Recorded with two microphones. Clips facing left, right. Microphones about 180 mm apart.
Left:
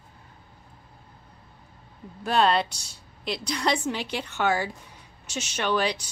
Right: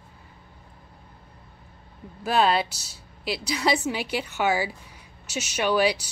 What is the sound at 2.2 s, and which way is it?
A woman's voice, 5° right (ahead or behind).